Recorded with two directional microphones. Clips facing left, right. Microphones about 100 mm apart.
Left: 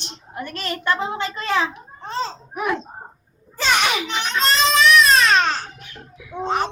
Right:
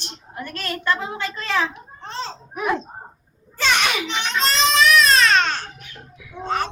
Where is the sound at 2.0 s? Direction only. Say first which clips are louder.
Left 4 dB; 5° left (ahead or behind).